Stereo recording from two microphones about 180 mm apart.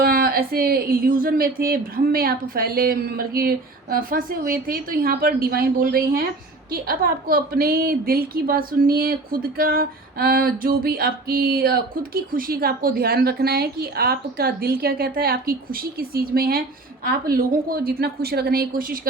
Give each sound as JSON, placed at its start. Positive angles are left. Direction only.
{"t": 0.0, "sound": "a woman's voice", "side_deg": -55}